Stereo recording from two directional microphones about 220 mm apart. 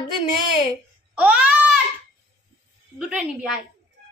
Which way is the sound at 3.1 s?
5° right (ahead or behind).